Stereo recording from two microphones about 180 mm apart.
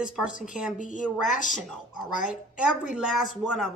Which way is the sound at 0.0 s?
5° right (ahead or behind).